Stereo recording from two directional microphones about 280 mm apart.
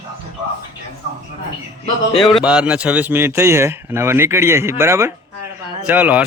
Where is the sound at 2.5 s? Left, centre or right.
Centre.